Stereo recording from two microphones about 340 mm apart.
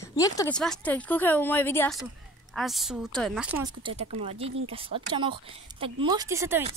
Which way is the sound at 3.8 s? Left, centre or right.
Centre.